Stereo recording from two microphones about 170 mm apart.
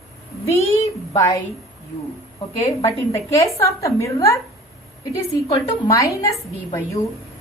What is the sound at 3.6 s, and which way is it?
A woman's voice, 15° left (ahead or behind).